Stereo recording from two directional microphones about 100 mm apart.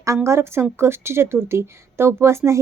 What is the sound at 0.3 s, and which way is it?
Speech, 25° right (ahead or behind).